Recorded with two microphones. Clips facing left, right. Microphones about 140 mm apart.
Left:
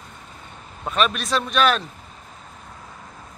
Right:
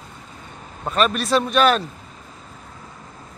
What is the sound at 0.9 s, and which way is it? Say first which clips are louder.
Speech: right 3 dB; centre (ahead or behind).